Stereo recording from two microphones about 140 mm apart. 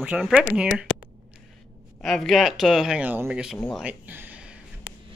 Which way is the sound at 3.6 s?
5° left (ahead or behind).